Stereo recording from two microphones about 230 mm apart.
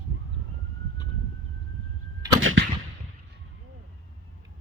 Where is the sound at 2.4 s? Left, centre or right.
Right.